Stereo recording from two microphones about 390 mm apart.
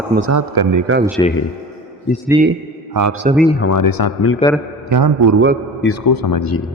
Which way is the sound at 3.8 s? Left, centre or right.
Left.